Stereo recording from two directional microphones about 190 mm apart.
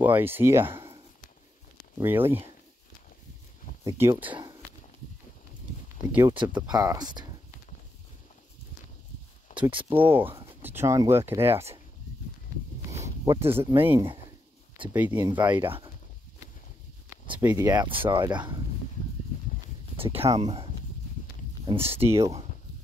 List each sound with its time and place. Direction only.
0.0 s speech: 10° right (ahead or behind)
2.0 s speech: 10° right (ahead or behind)
3.8 s speech: 15° right (ahead or behind)
6.3 s speech: 25° right (ahead or behind)
9.5 s a sound: 40° left (ahead or behind)
9.8 s speech: 10° right (ahead or behind)
13.0 s speech: 15° right (ahead or behind)
15.3 s speech: 25° right (ahead or behind)
17.1 s speech: 10° right (ahead or behind)
20.0 s speech: 30° right (ahead or behind)
21.6 s speech: 30° right (ahead or behind)
22.0 s speech: 15° right (ahead or behind)